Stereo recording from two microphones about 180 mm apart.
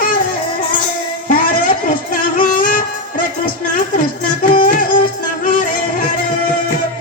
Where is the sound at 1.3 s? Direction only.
50° left (ahead or behind).